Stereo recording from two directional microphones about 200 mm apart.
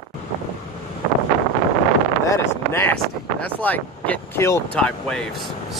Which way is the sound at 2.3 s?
10° left (ahead or behind).